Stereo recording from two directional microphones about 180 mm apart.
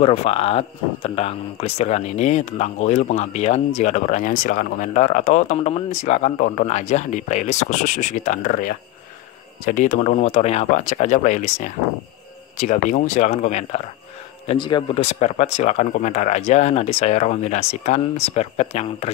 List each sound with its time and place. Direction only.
0.0 s speech: 35° left (ahead or behind)